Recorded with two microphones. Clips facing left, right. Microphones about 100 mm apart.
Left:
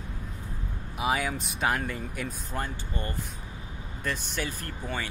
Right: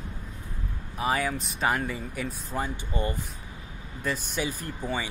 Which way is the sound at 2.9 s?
15° right (ahead or behind).